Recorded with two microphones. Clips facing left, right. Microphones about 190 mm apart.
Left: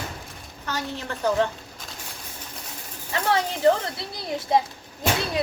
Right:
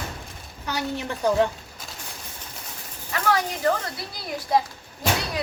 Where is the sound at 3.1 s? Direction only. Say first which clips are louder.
Even; 25° left (ahead or behind).